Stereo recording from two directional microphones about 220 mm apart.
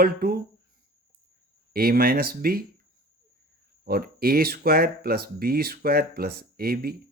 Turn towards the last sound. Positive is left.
turn(degrees=-45)  # may be behind; listen again after turning